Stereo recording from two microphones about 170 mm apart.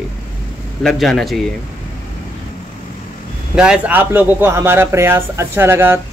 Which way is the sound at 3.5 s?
5° right (ahead or behind).